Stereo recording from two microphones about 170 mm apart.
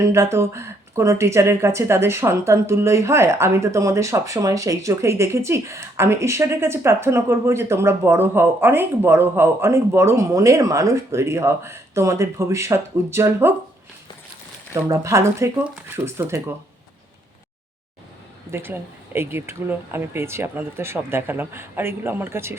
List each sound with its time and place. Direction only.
0.0 s speech: 15° right (ahead or behind)
14.7 s speech: 15° right (ahead or behind)
18.5 s speech: 15° right (ahead or behind)